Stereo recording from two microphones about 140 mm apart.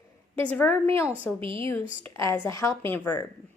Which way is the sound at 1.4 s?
40° right (ahead or behind).